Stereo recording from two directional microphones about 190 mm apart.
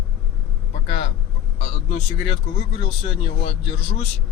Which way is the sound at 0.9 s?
30° left (ahead or behind).